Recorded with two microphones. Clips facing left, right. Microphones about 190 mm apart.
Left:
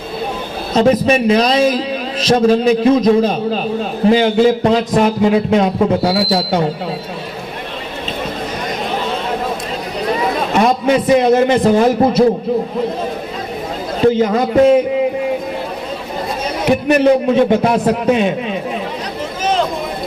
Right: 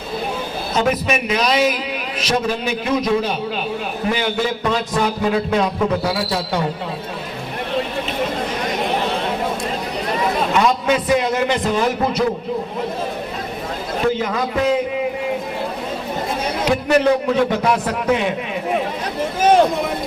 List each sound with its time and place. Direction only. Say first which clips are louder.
0.8 s a man's voice: left 8 dB; 30° left (ahead or behind)
10.5 s a man's voice: left 6 dB; 30° left (ahead or behind)
14.0 s a man's voice: left 8 dB; 30° left (ahead or behind)
16.6 s a man's voice: left 4 dB; 20° left (ahead or behind)
19.4 s a sound: right 4 dB; 50° right (ahead or behind)